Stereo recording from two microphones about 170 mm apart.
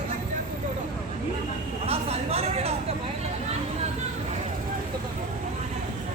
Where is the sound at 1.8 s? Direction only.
35° right (ahead or behind).